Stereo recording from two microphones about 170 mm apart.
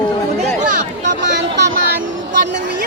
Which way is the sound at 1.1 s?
90° right.